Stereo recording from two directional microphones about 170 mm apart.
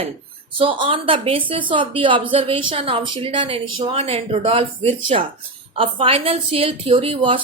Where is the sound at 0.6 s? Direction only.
30° right (ahead or behind).